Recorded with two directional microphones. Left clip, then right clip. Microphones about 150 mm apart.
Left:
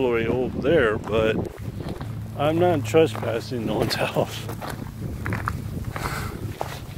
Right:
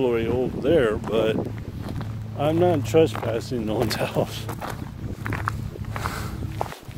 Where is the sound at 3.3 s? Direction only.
45° right (ahead or behind).